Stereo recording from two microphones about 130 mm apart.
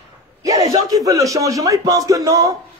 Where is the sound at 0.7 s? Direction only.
30° right (ahead or behind).